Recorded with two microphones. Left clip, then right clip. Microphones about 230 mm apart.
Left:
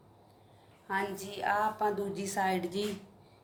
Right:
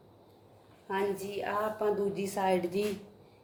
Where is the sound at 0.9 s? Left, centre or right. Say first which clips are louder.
Right 2 dB; left.